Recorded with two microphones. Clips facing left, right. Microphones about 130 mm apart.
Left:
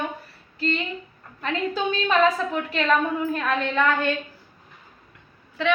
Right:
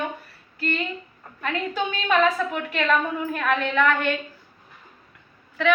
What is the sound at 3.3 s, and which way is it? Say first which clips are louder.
Speech: right 1 dB; 30° left (ahead or behind).